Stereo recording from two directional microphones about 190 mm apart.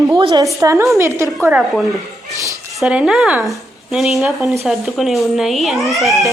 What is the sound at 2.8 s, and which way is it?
A child's voice, 5° right (ahead or behind).